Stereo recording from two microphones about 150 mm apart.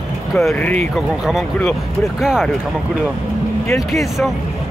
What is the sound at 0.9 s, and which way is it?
Speech, centre (ahead or behind).